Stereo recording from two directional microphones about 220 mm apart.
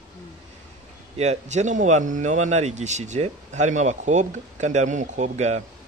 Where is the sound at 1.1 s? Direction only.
30° right (ahead or behind).